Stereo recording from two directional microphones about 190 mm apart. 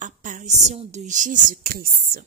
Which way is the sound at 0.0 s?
40° right (ahead or behind).